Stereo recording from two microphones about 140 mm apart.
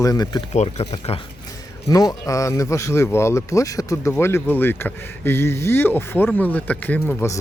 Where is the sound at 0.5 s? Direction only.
50° left (ahead or behind).